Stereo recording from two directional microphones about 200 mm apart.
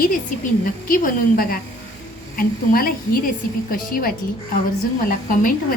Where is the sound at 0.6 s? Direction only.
45° left (ahead or behind).